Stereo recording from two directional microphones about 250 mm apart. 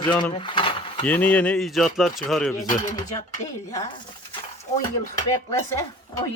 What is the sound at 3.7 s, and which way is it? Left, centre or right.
Speech, centre.